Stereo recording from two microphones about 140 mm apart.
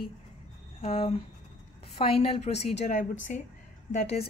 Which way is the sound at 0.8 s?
45° left (ahead or behind).